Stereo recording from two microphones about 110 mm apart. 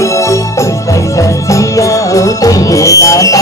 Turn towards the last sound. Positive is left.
turn(degrees=30)  # may be behind; listen again after turning